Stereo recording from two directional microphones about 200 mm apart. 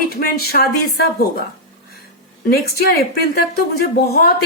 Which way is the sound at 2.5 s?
50° left (ahead or behind).